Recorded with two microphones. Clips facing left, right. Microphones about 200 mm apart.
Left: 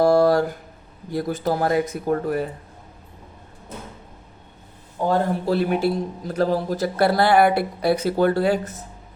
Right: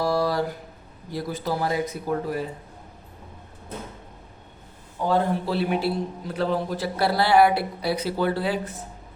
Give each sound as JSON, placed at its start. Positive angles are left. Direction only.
{"t": 0.0, "sound": "a sound", "side_deg": 50}
{"t": 1.1, "sound": "a man's voice", "side_deg": 50}
{"t": 5.0, "sound": "a man's voice", "side_deg": 45}